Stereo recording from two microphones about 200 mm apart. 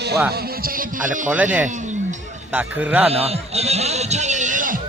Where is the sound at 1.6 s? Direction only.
40° right (ahead or behind).